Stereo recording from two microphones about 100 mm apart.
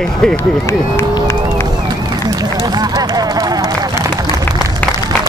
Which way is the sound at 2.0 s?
45° right (ahead or behind).